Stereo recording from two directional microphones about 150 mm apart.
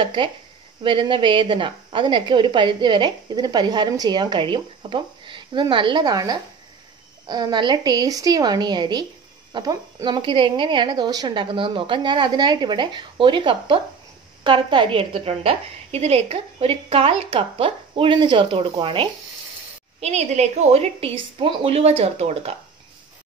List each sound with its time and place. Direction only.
0.0 s a woman's voice: 35° right (ahead or behind)
20.0 s a woman's voice: 45° right (ahead or behind)